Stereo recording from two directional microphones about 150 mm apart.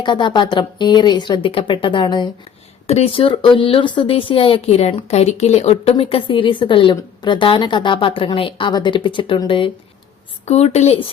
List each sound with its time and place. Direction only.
0.0 s a woman's voice: 30° left (ahead or behind)
2.8 s a woman's voice: 40° left (ahead or behind)
10.4 s speech: 45° left (ahead or behind)